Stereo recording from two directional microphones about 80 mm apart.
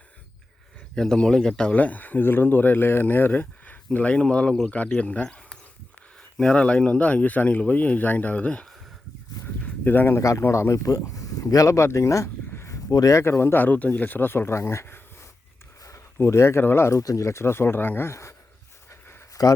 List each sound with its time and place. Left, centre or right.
0.9 s speech: centre
1.7 s speech: centre
9.6 s a sound: left
10.2 s speech: left
16.2 s speech: left
17.0 s speech: left
18.9 s a sound: left